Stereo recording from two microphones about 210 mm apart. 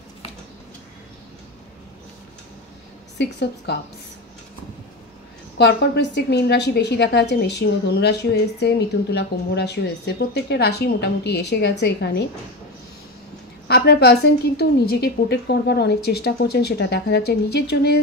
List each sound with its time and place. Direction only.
3.2 s a woman's voice: 55° left (ahead or behind)
5.6 s a woman's voice: 55° left (ahead or behind)
13.7 s a woman's voice: 50° left (ahead or behind)